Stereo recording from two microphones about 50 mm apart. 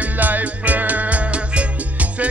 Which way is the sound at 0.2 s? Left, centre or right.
Right.